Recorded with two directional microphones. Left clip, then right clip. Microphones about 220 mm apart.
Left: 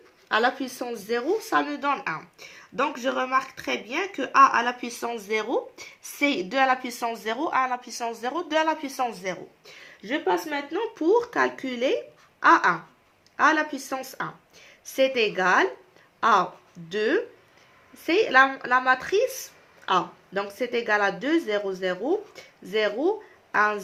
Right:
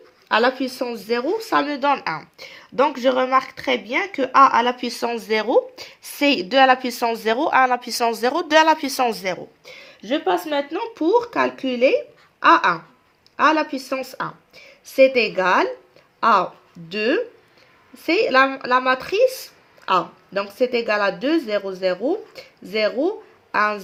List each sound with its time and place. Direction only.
0.3 s speech: 35° right (ahead or behind)
10.1 s speech: 30° right (ahead or behind)
13.3 s speech: 30° right (ahead or behind)